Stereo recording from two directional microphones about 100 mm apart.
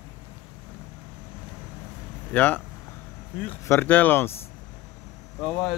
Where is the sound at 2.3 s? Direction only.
15° left (ahead or behind).